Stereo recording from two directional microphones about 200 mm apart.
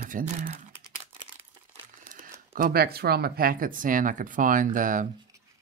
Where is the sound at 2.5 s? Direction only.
50° right (ahead or behind).